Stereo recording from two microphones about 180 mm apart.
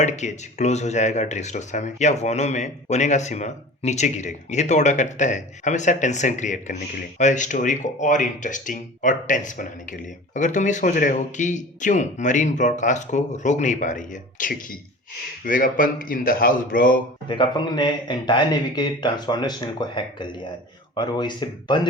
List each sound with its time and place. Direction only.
0.0 s speech: 40° left (ahead or behind)
17.2 s speech: 25° left (ahead or behind)